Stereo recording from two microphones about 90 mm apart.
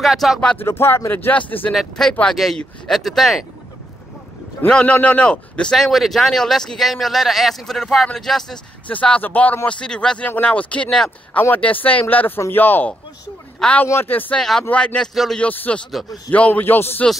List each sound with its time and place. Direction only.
0.0 s a man's voice: 5° right (ahead or behind)
0.6 s speech: 25° left (ahead or behind)
1.7 s a man's voice: 5° left (ahead or behind)
4.6 s a man's voice: 10° left (ahead or behind)
13.8 s speech: 25° left (ahead or behind)
14.4 s speech: 10° left (ahead or behind)